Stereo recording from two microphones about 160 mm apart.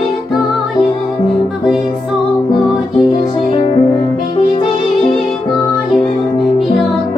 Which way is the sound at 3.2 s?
35° left (ahead or behind).